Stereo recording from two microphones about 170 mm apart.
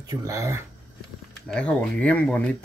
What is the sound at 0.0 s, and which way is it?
Speech, 20° right (ahead or behind).